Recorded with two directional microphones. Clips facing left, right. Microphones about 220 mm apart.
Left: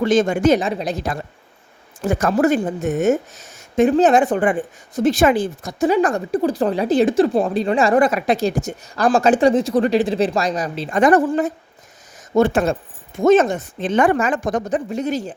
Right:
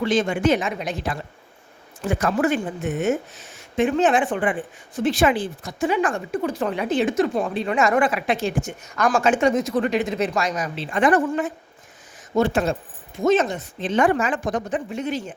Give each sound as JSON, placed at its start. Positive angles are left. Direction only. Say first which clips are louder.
{"t": 0.0, "sound": "speech", "louder": "left 5 dB", "side_deg": 45}
{"t": 12.3, "sound": "speech", "louder": "left 4 dB", "side_deg": 50}